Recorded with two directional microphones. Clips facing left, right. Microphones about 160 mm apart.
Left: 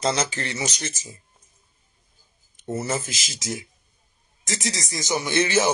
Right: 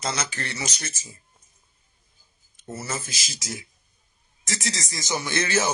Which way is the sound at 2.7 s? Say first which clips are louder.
Left 6 dB; 25° left (ahead or behind).